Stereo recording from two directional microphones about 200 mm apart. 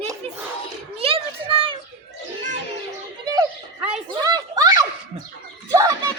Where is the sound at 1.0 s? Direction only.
30° right (ahead or behind).